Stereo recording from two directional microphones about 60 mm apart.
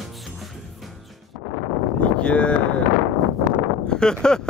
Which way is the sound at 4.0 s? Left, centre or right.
Centre.